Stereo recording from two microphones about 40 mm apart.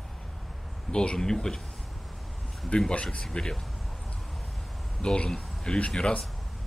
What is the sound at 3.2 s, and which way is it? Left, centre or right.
Speech, centre.